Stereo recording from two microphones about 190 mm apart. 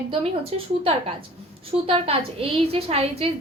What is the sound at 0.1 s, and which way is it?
A woman's voice, 30° right (ahead or behind).